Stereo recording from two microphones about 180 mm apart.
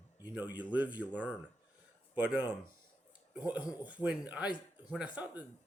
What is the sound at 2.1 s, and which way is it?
Speech, 10° right (ahead or behind).